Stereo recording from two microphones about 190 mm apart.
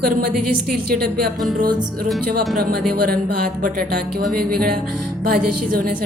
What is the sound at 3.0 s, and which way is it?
Speech, 50° right (ahead or behind).